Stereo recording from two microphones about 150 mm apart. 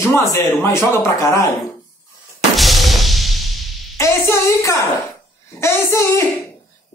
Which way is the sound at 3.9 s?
20° left (ahead or behind).